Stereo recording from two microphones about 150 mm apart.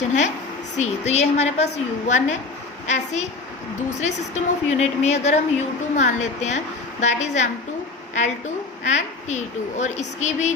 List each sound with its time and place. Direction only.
0.8 s a woman's voice: 50° left (ahead or behind)
8.8 s a woman's voice: 50° left (ahead or behind)